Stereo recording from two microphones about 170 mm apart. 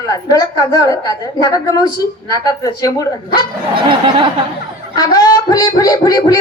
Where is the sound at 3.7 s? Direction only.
30° right (ahead or behind).